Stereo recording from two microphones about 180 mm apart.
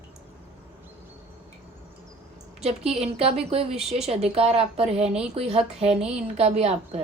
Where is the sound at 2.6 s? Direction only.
35° right (ahead or behind).